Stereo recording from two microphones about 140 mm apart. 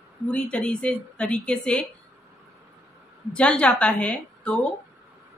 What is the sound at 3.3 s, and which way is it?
A woman's voice, 10° left (ahead or behind).